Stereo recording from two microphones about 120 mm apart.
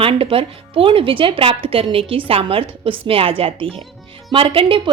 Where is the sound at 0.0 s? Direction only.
50° right (ahead or behind).